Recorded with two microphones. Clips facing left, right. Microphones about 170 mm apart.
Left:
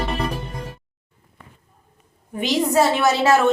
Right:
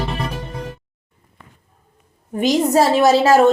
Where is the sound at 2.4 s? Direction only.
40° right (ahead or behind).